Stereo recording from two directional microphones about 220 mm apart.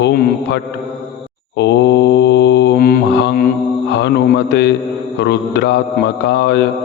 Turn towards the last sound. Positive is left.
turn(degrees=50)  # may be behind; listen again after turning